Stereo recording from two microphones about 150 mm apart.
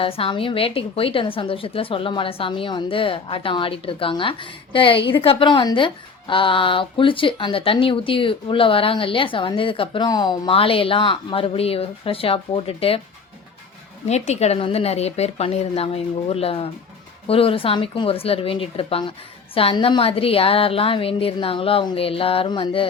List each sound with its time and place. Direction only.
0.0 s a woman's voice: 40° left (ahead or behind)
14.1 s a woman's voice: 45° left (ahead or behind)